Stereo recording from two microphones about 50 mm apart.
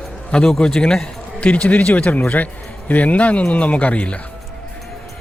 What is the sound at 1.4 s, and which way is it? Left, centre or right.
A man's voice, left.